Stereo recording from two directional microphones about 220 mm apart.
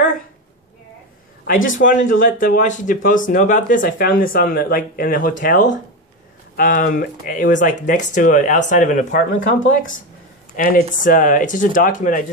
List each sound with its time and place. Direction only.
1.5 s speech: 35° left (ahead or behind)